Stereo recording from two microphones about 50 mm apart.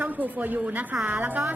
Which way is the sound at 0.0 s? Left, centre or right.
Right.